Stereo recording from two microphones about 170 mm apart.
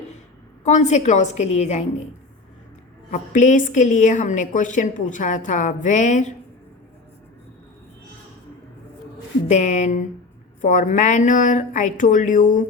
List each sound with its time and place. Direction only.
0.6 s a woman's voice: 40° left (ahead or behind)
3.1 s a woman's voice: 50° left (ahead or behind)
9.5 s a woman's voice: 45° left (ahead or behind)